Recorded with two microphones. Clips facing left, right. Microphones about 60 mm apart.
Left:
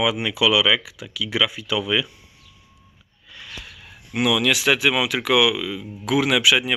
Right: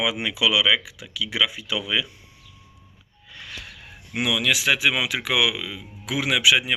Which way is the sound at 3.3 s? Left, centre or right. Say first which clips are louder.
Even; right.